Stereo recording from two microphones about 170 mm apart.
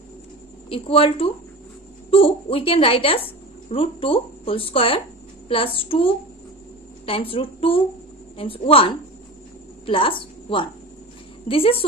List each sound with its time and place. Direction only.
0.7 s a woman's voice: 35° left (ahead or behind)